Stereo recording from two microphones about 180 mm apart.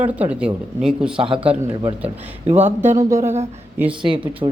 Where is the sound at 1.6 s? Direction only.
25° right (ahead or behind).